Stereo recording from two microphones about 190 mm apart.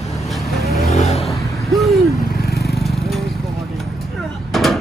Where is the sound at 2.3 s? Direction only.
55° left (ahead or behind).